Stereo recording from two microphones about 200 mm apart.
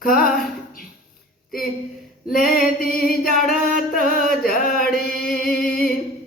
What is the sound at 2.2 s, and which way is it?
Singing, 45° left (ahead or behind).